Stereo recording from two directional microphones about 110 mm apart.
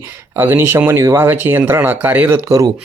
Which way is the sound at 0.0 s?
20° right (ahead or behind).